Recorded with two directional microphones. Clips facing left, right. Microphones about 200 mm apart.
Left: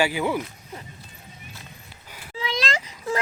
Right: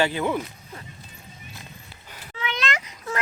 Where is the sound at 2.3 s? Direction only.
30° left (ahead or behind).